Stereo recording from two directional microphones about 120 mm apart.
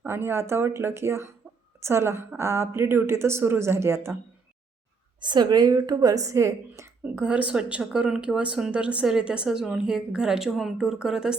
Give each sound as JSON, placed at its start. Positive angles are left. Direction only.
{"t": 0.0, "sound": "speech", "side_deg": -20}
{"t": 5.2, "sound": "speech", "side_deg": -35}